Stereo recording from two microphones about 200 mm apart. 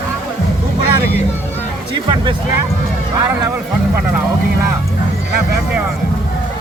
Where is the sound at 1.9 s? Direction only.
25° right (ahead or behind).